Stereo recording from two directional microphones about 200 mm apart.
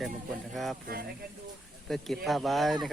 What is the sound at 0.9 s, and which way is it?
Speech, 50° right (ahead or behind).